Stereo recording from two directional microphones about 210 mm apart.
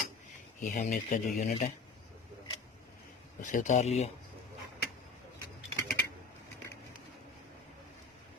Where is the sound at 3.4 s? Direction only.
35° left (ahead or behind).